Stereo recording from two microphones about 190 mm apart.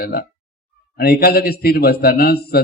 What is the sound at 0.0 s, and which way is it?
A man's voice, 50° left (ahead or behind).